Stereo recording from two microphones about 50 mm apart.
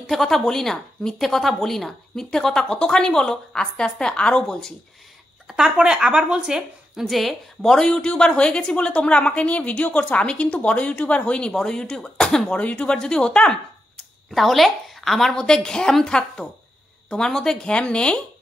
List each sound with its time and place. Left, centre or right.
0.1 s speech: centre
5.5 s speech: centre
7.1 s a woman's voice: centre
12.5 s speech: left
14.3 s a woman's voice: centre